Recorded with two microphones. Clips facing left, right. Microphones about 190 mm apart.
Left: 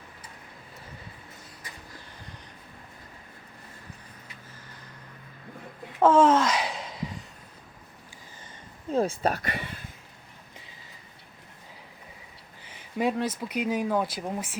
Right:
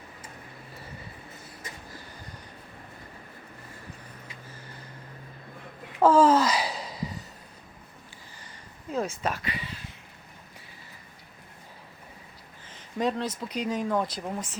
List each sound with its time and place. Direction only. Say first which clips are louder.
6.0 s a sound: even; centre (ahead or behind)
8.9 s speech: left 4 dB; 30° left (ahead or behind)
12.6 s speech: left 1 dB; 10° left (ahead or behind)